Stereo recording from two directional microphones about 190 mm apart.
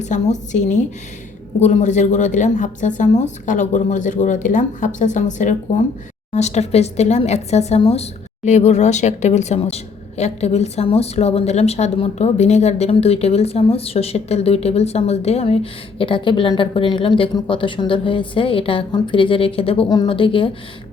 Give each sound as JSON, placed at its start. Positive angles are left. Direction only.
{"t": 0.0, "sound": "speech", "side_deg": 40}